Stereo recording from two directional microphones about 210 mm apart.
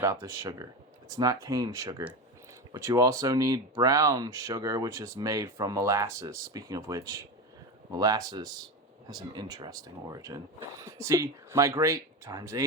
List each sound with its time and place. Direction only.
0.0 s speech: 15° right (ahead or behind)